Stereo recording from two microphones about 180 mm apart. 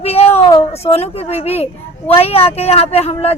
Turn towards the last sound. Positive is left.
turn(degrees=35)  # may be behind; listen again after turning